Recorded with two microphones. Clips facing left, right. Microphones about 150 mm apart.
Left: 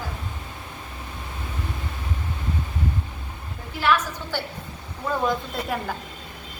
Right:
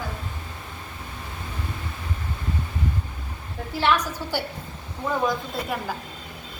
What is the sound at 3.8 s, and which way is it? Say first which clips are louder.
Speech: even; 30° right (ahead or behind).